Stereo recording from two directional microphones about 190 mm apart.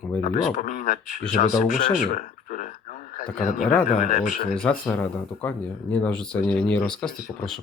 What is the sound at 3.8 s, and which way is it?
Speech, 40° left (ahead or behind).